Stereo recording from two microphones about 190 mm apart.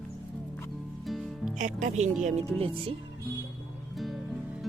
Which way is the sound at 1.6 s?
40° right (ahead or behind).